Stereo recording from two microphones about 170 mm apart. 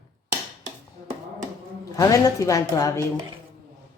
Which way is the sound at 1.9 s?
20° left (ahead or behind).